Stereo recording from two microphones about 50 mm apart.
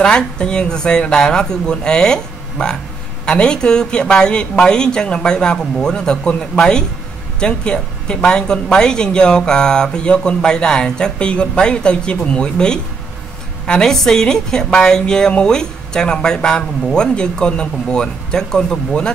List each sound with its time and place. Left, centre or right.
0.0 s speech: centre